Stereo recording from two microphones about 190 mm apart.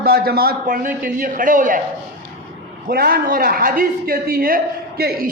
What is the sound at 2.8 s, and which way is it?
A man's voice, 50° right (ahead or behind).